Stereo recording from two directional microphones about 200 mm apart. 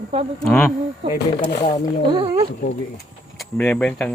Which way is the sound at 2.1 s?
25° right (ahead or behind).